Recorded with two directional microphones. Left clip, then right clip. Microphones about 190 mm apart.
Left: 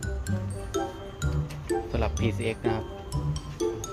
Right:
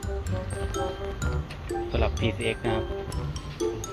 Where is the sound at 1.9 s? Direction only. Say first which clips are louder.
Right 2 dB; 20° left (ahead or behind).